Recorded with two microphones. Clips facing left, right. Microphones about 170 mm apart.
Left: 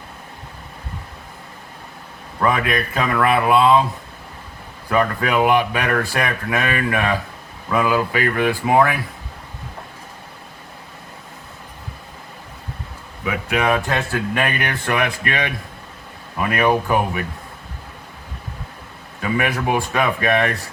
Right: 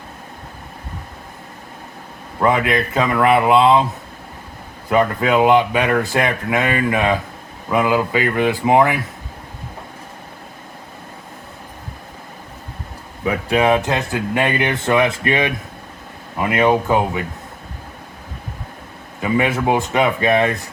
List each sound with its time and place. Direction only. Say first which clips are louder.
2.4 s speech: right 3 dB; 25° right (ahead or behind)
4.9 s speech: right 3 dB; 20° right (ahead or behind)
13.2 s speech: right 4 dB; 30° right (ahead or behind)
19.2 s speech: right 3 dB; 25° right (ahead or behind)